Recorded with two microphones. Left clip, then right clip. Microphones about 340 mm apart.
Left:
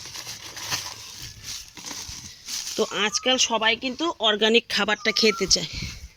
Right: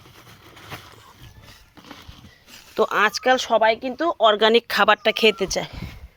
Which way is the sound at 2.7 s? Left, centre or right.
Right.